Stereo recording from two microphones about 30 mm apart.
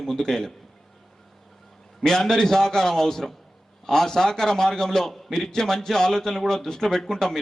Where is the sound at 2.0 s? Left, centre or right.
Centre.